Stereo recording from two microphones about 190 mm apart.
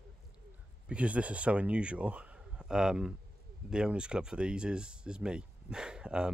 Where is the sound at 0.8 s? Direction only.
5° right (ahead or behind).